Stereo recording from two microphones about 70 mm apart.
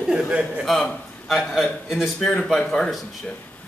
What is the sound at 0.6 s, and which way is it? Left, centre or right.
A man's voice, centre.